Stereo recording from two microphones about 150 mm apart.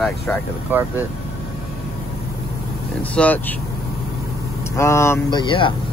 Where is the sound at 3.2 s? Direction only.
10° left (ahead or behind).